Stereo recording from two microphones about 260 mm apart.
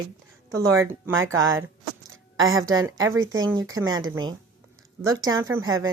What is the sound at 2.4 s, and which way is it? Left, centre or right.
Speech, right.